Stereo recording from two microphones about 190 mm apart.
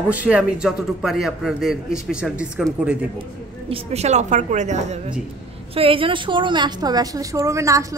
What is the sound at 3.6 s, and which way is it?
A woman's voice, 35° right (ahead or behind).